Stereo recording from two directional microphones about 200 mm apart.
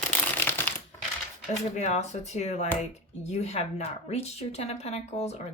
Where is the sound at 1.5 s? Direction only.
35° left (ahead or behind).